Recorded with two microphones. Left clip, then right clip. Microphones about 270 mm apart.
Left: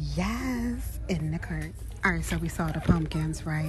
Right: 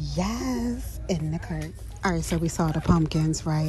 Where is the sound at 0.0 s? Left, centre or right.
Centre.